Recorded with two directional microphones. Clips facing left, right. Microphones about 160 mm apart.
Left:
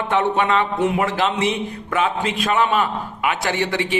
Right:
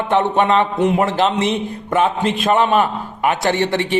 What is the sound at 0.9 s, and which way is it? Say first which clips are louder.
Speech: right 4 dB; 40° right (ahead or behind).